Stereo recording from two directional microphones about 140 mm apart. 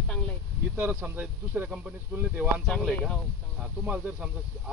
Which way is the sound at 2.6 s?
Centre (ahead or behind).